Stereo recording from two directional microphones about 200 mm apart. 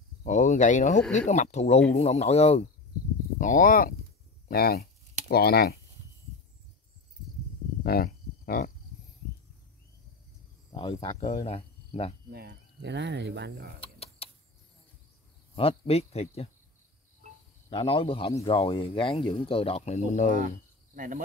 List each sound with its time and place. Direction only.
0.2 s speech: 35° left (ahead or behind)
7.8 s a sound: 50° left (ahead or behind)
10.7 s speech: 25° left (ahead or behind)
12.3 s speech: 55° right (ahead or behind)
13.7 s a sound: 30° left (ahead or behind)
15.5 s speech: 30° left (ahead or behind)
17.6 s speech: 25° left (ahead or behind)
20.3 s cricket: 45° right (ahead or behind)